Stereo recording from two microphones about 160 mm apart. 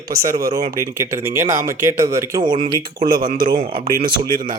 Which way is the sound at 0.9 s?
15° right (ahead or behind).